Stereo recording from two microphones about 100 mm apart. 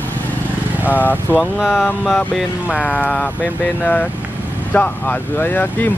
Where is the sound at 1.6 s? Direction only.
5° right (ahead or behind).